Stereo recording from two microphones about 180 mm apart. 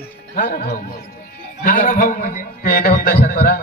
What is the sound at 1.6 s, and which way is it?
A man's voice, 45° left (ahead or behind).